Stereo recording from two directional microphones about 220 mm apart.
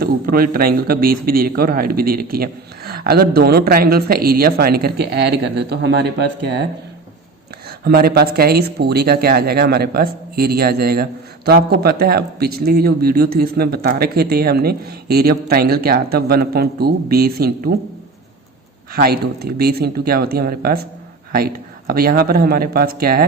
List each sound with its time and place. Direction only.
0.0 s speech: 40° right (ahead or behind)
7.9 s speech: 45° right (ahead or behind)
18.9 s speech: 45° right (ahead or behind)